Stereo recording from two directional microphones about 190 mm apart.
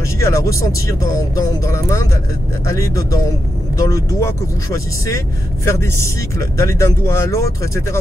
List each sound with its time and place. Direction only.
0.2 s speech: 15° left (ahead or behind)